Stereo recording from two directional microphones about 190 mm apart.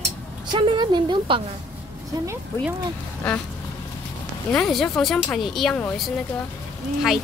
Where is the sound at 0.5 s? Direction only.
25° right (ahead or behind).